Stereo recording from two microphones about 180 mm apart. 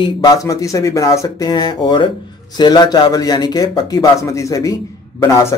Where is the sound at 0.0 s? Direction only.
20° left (ahead or behind).